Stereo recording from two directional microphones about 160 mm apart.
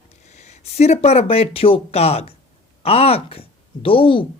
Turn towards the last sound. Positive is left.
turn(degrees=35)  # may be behind; listen again after turning